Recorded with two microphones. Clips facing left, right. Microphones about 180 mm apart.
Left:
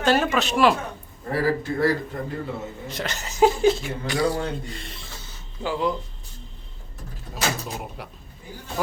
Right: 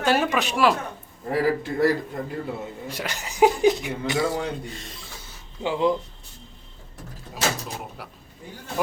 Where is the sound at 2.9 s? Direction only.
10° right (ahead or behind).